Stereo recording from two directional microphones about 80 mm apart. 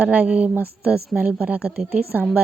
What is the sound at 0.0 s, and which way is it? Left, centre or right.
A woman's voice, centre.